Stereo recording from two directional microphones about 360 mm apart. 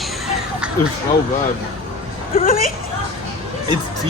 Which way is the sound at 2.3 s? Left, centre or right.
Left.